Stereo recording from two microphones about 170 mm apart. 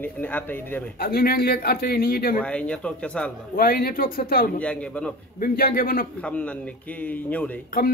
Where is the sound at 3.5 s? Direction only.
65° left (ahead or behind).